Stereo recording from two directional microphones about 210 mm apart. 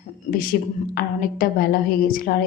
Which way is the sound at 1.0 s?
45° left (ahead or behind).